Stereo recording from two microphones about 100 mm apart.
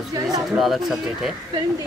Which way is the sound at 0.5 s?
Centre (ahead or behind).